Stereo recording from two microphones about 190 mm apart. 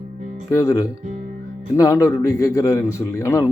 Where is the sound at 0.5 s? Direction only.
15° left (ahead or behind).